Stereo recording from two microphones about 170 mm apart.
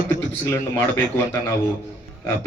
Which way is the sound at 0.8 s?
15° left (ahead or behind).